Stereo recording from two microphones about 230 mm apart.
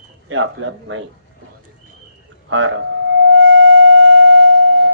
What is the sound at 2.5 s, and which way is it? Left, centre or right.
Civil defense siren, right.